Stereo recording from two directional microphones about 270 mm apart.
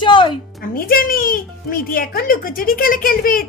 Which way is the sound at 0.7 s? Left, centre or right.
Left.